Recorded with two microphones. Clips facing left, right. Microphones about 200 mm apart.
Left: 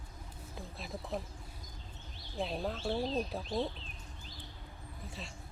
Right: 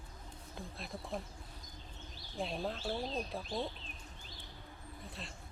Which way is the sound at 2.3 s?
Centre (ahead or behind).